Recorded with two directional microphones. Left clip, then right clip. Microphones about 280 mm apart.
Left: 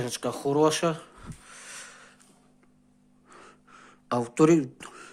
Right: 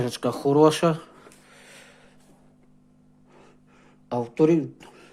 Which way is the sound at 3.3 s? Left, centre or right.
Centre.